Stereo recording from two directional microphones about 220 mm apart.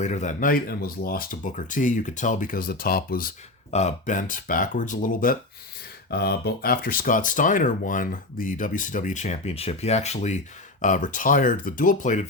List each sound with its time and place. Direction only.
0.0 s speech: 30° left (ahead or behind)